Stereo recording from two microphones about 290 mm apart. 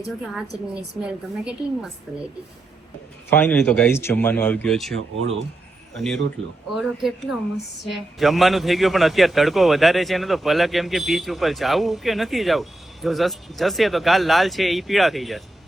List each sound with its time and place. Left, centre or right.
1.0 s a man's voice: centre
3.2 s speech: centre
4.9 s speech: right
5.9 s a man's voice: centre